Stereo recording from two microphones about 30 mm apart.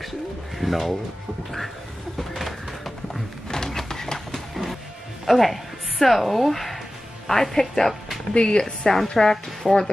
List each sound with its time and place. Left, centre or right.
0.6 s speech: centre
2.1 s music: centre
3.4 s a sound: centre
4.3 s a sound: centre
5.2 s speech: centre
7.5 s a woman's voice: centre
8.3 s a woman's voice: left
8.9 s a woman's voice: centre